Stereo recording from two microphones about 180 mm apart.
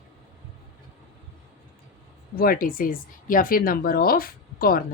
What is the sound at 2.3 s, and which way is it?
Speech, 55° left (ahead or behind).